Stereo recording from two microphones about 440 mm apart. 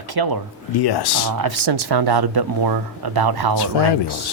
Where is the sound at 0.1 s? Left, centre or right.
Right.